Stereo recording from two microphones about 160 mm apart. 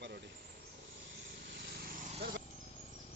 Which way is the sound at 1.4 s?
90° right.